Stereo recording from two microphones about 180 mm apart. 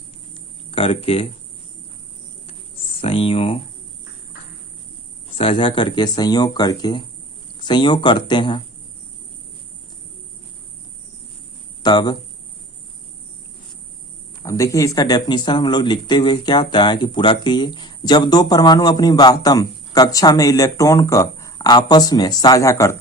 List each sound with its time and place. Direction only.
0.7 s speech: 35° left (ahead or behind)
3.0 s speech: 30° left (ahead or behind)
5.4 s speech: 30° left (ahead or behind)
11.8 s speech: 20° left (ahead or behind)
14.4 s speech: 15° left (ahead or behind)